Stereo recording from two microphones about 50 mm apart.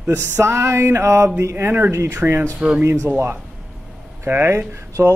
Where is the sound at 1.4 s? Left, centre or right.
Right.